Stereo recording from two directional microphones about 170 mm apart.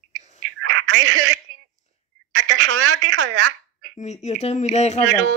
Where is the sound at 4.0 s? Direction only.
40° left (ahead or behind).